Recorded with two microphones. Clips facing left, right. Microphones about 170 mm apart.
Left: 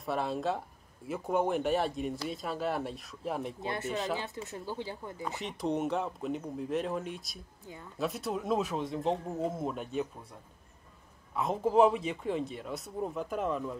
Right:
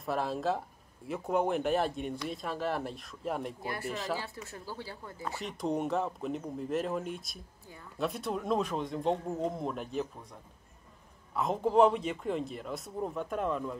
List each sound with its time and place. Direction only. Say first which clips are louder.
0.0 s speech: even; centre (ahead or behind)
3.6 s speech: left 2 dB; 20° left (ahead or behind)
5.4 s speech: even; centre (ahead or behind)
11.3 s speech: even; centre (ahead or behind)